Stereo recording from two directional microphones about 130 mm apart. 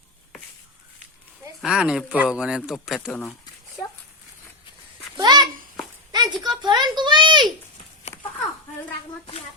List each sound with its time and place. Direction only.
1.6 s speech: 5° right (ahead or behind)
3.1 s speech: 10° left (ahead or behind)
5.1 s a sound: 35° right (ahead or behind)